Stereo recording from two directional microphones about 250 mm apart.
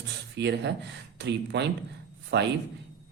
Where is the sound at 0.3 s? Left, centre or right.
Right.